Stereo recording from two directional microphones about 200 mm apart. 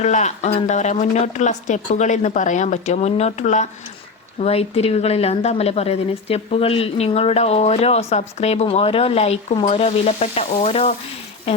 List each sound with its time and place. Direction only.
0.0 s a woman's voice: 35° left (ahead or behind)